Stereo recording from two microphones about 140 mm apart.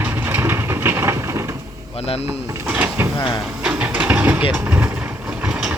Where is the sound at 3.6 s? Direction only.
5° right (ahead or behind).